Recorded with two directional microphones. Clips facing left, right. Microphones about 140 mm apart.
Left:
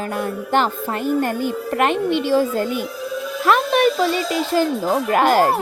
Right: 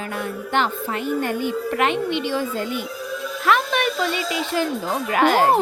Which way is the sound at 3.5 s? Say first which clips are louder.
Left 4 dB; 35° left (ahead or behind).